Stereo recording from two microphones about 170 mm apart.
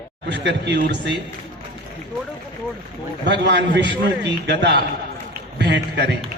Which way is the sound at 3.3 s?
90° right.